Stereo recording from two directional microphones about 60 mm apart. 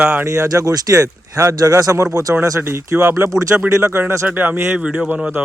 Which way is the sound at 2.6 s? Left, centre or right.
Right.